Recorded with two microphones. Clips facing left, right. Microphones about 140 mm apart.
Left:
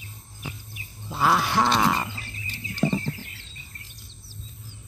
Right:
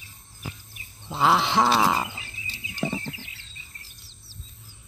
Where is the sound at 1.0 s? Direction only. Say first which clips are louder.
Right 1 dB; 20° right (ahead or behind).